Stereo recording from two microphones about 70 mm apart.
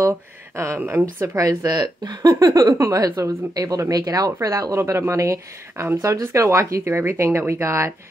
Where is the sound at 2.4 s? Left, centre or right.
Right.